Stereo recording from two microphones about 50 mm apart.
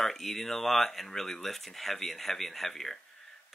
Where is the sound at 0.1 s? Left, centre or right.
Centre.